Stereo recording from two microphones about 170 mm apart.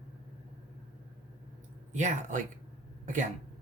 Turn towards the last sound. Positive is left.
turn(degrees=-45)  # may be behind; listen again after turning